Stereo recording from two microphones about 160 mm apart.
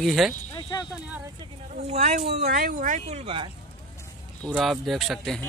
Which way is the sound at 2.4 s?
60° right (ahead or behind).